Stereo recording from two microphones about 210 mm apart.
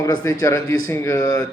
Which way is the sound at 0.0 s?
15° left (ahead or behind).